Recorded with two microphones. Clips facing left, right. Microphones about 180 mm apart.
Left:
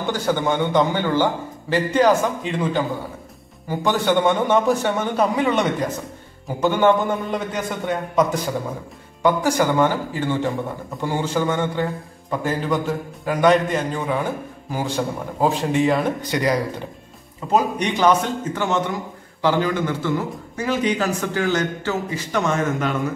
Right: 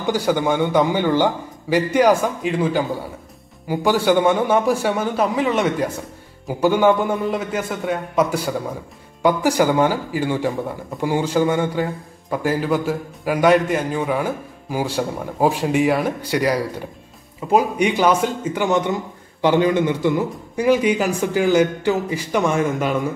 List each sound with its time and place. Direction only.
0.0 s a man's voice: 10° right (ahead or behind)